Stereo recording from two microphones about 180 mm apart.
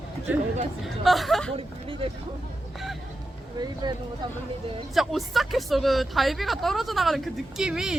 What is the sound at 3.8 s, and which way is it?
Speech, 25° right (ahead or behind).